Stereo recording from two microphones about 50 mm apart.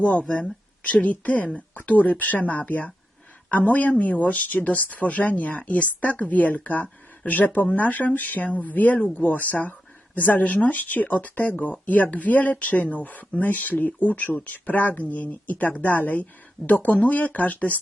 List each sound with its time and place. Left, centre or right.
0.0 s speech: left